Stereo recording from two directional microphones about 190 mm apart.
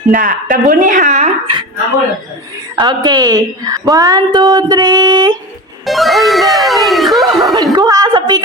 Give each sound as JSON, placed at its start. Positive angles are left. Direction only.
{"t": 0.1, "sound": "speech", "side_deg": -45}
{"t": 2.7, "sound": "a woman's voice", "side_deg": -20}
{"t": 5.8, "sound": "speech", "side_deg": 0}
{"t": 7.8, "sound": "a woman's voice", "side_deg": -20}